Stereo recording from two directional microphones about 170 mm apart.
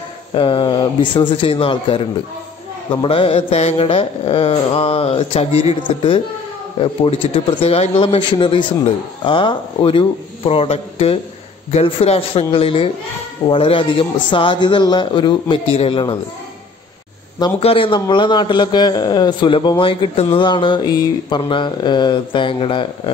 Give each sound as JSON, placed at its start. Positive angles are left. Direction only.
{"t": 0.3, "sound": "a man's voice", "side_deg": 30}
{"t": 3.0, "sound": "mantra", "side_deg": 30}
{"t": 13.5, "sound": "a man's voice", "side_deg": 30}
{"t": 17.6, "sound": "a man's voice", "side_deg": 35}